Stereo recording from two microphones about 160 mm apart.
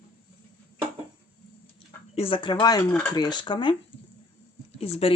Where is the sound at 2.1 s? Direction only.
35° left (ahead or behind).